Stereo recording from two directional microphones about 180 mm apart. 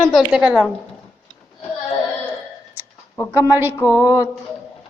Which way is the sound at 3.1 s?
15° left (ahead or behind).